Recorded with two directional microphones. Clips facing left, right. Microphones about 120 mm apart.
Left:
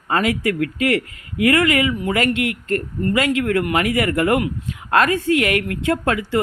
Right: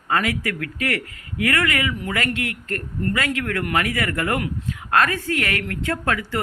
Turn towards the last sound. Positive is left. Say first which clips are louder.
# left 5 dB
turn(degrees=20)  # may be behind; listen again after turning